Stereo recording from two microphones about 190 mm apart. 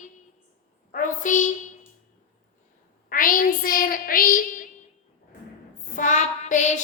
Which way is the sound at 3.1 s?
45° left (ahead or behind).